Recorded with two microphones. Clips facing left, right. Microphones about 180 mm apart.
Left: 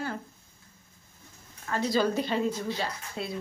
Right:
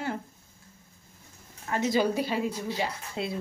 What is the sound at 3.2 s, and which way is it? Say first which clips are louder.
Dishes: right 3 dB; 20° right (ahead or behind).